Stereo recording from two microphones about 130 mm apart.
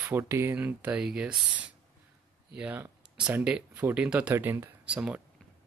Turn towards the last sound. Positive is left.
turn(degrees=-10)  # may be behind; listen again after turning